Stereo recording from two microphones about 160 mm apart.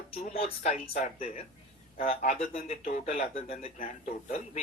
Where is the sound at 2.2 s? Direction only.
55° left (ahead or behind).